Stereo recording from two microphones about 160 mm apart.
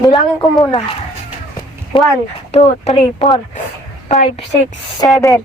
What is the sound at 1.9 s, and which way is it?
A woman's voice, 35° left (ahead or behind).